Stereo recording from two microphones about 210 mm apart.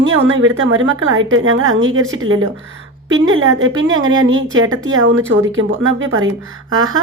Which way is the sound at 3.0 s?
70° right (ahead or behind).